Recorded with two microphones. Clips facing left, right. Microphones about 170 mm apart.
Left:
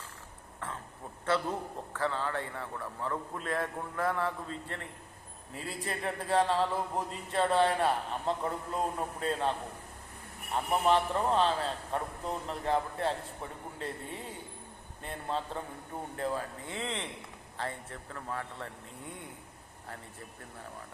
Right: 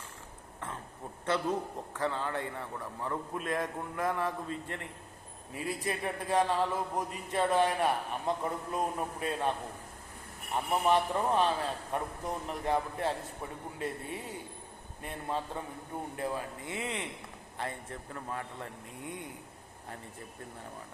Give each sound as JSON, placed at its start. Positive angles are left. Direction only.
{"t": 1.2, "sound": "a man's voice", "side_deg": -20}
{"t": 10.8, "sound": "a man's voice", "side_deg": -15}